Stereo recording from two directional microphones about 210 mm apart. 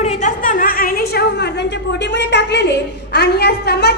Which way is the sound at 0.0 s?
35° left (ahead or behind).